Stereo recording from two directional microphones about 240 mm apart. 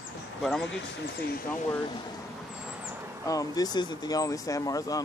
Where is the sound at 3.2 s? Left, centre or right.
Centre.